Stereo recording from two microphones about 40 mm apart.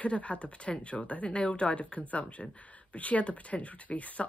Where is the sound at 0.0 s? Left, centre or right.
Left.